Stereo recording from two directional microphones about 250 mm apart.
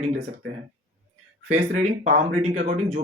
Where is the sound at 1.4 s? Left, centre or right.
Right.